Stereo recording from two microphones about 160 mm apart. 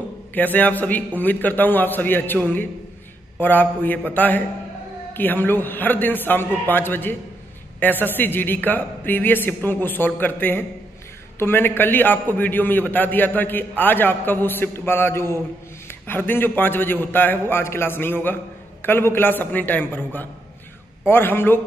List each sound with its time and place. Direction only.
0.3 s a man's voice: 10° left (ahead or behind)